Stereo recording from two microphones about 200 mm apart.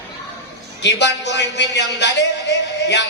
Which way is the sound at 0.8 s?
60° left (ahead or behind).